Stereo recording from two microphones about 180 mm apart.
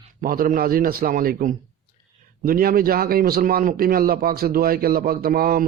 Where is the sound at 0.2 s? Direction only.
50° right (ahead or behind).